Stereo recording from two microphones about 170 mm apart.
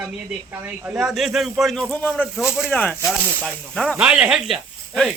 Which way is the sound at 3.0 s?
10° right (ahead or behind).